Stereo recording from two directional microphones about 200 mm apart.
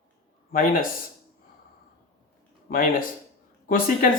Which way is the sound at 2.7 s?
45° left (ahead or behind).